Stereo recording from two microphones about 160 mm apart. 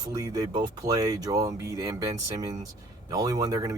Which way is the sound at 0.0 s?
20° right (ahead or behind).